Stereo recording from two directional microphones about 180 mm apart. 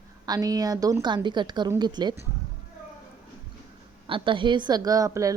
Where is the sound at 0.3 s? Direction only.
20° right (ahead or behind).